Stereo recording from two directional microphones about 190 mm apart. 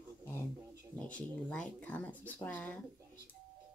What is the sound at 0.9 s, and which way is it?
Speech, 5° left (ahead or behind).